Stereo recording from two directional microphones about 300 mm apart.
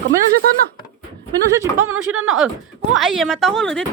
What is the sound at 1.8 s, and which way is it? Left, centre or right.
Speech, right.